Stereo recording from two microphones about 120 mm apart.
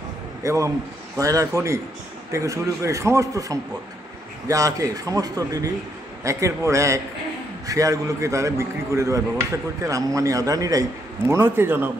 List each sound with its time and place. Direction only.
0.4 s a man's voice: 25° right (ahead or behind)